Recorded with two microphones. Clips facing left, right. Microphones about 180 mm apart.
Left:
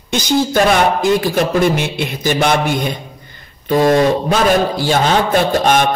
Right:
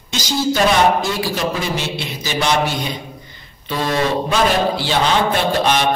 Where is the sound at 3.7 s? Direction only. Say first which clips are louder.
Left 7 dB; 45° left (ahead or behind).